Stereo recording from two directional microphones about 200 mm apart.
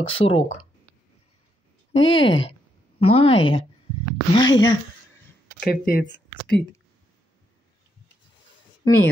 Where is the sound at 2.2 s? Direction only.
70° left (ahead or behind).